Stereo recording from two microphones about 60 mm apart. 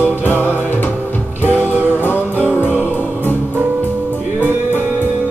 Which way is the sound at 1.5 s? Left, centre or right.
Right.